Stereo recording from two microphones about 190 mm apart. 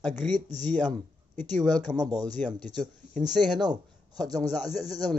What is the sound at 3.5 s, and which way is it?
Speech, 20° right (ahead or behind).